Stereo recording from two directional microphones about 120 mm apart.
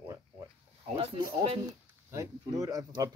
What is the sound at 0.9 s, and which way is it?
Speech, 45° right (ahead or behind).